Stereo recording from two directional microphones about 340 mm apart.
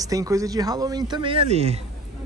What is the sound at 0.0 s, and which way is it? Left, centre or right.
Speech, centre.